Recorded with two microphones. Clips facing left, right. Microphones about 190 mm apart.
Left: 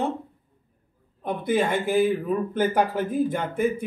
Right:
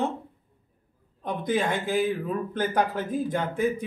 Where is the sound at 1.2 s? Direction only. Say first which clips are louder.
Left 3 dB; 10° left (ahead or behind).